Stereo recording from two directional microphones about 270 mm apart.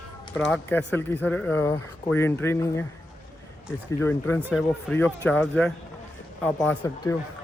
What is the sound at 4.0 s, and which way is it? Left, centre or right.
Speech, centre.